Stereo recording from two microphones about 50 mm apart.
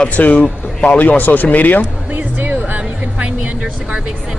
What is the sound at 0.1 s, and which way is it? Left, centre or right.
Speech, left.